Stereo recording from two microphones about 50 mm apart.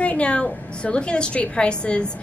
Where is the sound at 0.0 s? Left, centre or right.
Left.